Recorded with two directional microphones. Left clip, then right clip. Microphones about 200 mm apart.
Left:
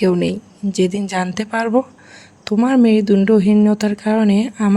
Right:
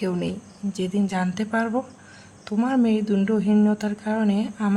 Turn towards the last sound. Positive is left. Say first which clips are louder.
# left 7 dB
turn(degrees=35)  # may be behind; listen again after turning